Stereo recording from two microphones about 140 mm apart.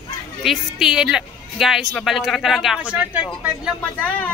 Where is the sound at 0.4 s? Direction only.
Centre (ahead or behind).